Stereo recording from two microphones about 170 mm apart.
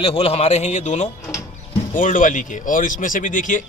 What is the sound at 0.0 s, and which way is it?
A man's voice, 35° left (ahead or behind).